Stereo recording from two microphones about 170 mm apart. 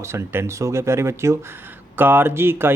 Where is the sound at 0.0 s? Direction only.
15° right (ahead or behind).